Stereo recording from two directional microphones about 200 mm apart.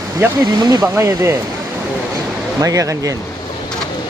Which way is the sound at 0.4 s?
20° right (ahead or behind).